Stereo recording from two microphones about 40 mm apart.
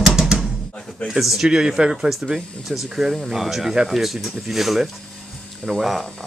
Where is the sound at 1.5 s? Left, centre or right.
Centre.